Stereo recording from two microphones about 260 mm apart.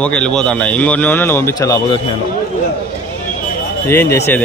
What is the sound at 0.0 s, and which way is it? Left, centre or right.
Speech, centre.